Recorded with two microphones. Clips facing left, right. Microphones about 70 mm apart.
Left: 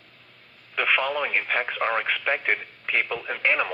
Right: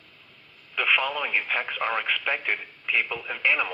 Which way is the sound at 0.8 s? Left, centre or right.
Left.